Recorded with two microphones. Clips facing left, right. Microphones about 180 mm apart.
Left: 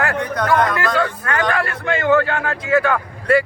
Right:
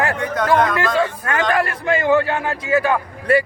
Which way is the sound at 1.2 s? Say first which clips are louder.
Right 1 dB; 20° right (ahead or behind).